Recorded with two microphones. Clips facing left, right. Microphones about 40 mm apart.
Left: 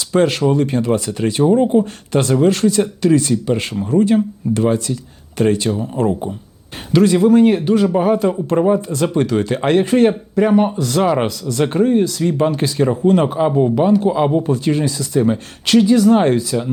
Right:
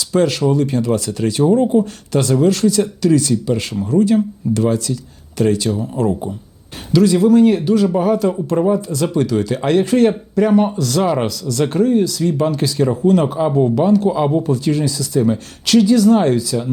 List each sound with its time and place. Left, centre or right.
0.0 s speech: left